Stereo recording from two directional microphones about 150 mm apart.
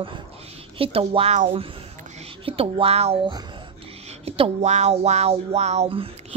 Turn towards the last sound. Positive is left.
turn(degrees=-40)  # may be behind; listen again after turning